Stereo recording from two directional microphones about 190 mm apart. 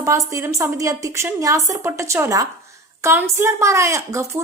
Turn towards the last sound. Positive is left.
turn(degrees=-15)  # may be behind; listen again after turning